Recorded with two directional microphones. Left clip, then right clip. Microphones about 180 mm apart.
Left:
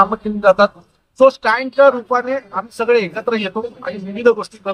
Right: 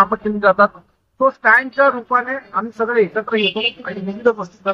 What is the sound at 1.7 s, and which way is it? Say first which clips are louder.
Speech: left 3 dB; 20° left (ahead or behind).